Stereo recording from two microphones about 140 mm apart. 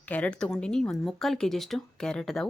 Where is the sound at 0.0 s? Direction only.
10° left (ahead or behind).